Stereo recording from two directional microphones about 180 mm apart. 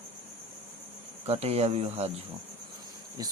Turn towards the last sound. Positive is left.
turn(degrees=-20)  # may be behind; listen again after turning